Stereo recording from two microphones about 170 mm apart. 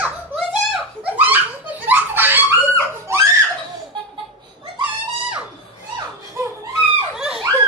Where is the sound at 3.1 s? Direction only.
15° right (ahead or behind).